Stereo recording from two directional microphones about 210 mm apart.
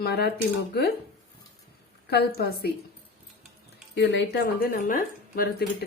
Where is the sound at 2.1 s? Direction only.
50° left (ahead or behind).